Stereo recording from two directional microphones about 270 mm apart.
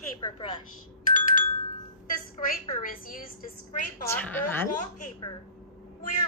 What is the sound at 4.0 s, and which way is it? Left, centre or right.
Speech, centre.